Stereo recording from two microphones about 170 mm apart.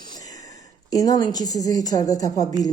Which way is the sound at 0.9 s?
20° left (ahead or behind).